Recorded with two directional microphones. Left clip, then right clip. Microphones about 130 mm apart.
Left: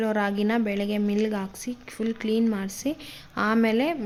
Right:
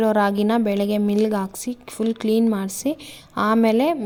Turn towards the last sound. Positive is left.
turn(degrees=-35)  # may be behind; listen again after turning